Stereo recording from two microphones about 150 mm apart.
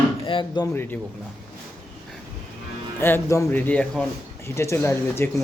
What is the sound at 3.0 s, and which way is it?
A man's voice, 15° left (ahead or behind).